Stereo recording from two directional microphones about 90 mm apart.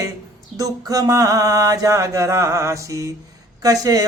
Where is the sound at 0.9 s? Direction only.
40° right (ahead or behind).